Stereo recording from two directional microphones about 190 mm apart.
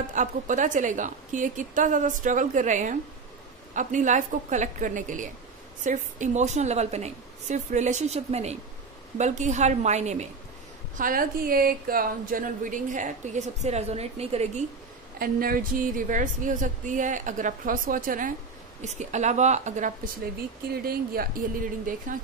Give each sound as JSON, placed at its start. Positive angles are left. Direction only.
{"t": 0.1, "sound": "a woman's voice", "side_deg": -40}
{"t": 11.0, "sound": "a woman's voice", "side_deg": -45}
{"t": 15.1, "sound": "a woman's voice", "side_deg": -50}
{"t": 20.7, "sound": "a woman's voice", "side_deg": -50}